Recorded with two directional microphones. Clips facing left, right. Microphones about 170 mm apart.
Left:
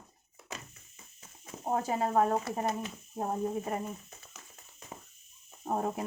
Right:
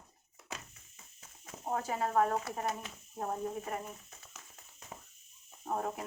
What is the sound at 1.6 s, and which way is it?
Speech, 25° left (ahead or behind).